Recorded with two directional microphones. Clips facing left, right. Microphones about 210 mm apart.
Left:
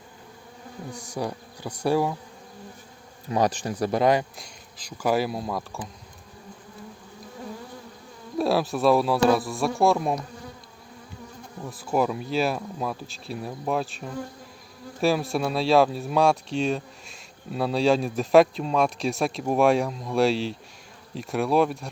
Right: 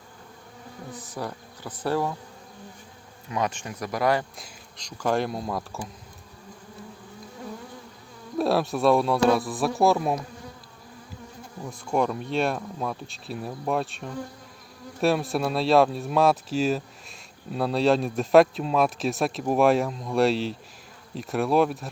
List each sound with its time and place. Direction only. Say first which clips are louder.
0.9 s speech: left 4 dB; 15° left (ahead or behind)
3.2 s speech: left 5 dB; 35° left (ahead or behind); by 4.3 s 20° left (ahead or behind)
4.4 s speech: even; centre (ahead or behind)
8.4 s speech: even; centre (ahead or behind)
11.6 s speech: left 1 dB; 5° left (ahead or behind)